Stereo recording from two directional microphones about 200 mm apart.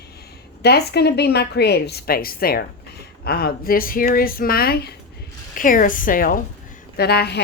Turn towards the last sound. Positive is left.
turn(degrees=55)  # may be behind; listen again after turning